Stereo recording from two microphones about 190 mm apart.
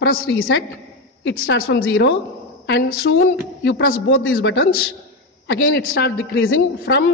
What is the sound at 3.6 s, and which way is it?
Speech, 70° left (ahead or behind).